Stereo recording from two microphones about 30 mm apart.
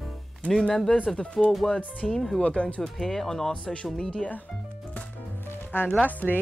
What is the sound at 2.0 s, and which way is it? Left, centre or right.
Speech, centre.